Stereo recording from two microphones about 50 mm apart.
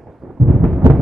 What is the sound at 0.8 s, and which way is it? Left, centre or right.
Music, right.